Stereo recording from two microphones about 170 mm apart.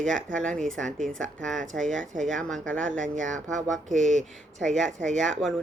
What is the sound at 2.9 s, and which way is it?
Speech, 50° right (ahead or behind).